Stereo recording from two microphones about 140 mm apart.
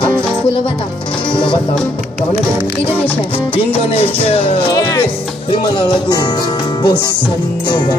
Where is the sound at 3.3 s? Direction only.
40° left (ahead or behind).